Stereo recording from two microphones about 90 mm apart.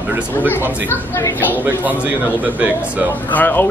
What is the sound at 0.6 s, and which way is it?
Speech, 25° left (ahead or behind).